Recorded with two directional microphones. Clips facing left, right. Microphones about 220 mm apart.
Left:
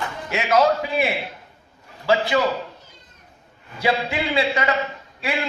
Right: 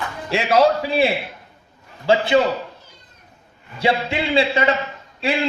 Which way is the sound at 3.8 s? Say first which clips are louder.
Right 2 dB; 25° right (ahead or behind).